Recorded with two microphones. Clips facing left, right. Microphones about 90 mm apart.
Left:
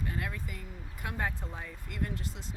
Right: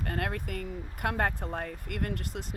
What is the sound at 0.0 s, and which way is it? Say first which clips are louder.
Speech: right 4 dB; 60° right (ahead or behind).